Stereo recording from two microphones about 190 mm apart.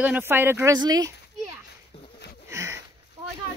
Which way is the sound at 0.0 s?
10° right (ahead or behind).